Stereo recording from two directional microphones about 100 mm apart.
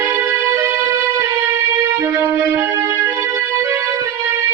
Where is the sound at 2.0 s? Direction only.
25° right (ahead or behind).